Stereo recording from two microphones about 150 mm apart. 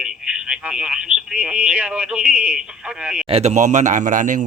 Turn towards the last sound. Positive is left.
turn(degrees=-60)  # may be behind; listen again after turning